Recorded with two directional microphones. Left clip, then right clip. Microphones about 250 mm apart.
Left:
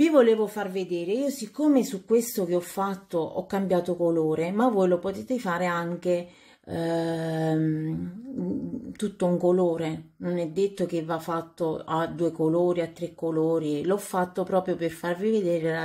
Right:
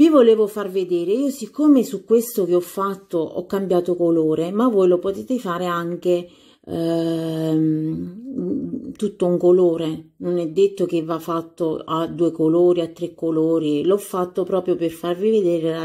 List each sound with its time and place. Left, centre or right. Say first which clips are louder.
0.0 s speech: right 7 dB; centre
9.2 s speech: right 7 dB; centre